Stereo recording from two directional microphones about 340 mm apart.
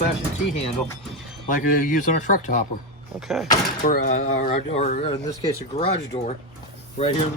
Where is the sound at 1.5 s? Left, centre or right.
Left.